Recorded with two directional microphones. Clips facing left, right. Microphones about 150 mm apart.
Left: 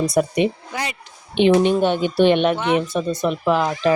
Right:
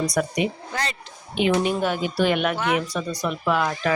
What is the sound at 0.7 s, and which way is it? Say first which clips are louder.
Speech: left 1 dB; 15° left (ahead or behind).